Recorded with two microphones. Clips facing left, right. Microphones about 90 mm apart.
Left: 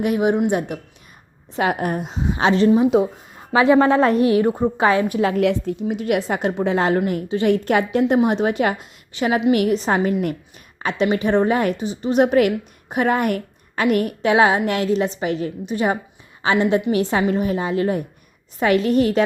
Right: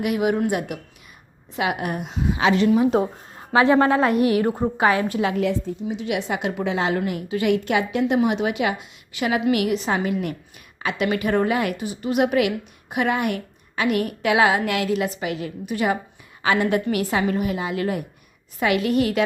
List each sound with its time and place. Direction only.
0.0 s a woman's voice: 30° left (ahead or behind)
1.5 s a woman's voice: 40° left (ahead or behind)
3.3 s a sound: 20° right (ahead or behind)
3.7 s a woman's voice: 20° left (ahead or behind)
5.4 s a woman's voice: 65° left (ahead or behind); by 15.5 s 35° left (ahead or behind)
15.6 s a woman's voice: 25° left (ahead or behind)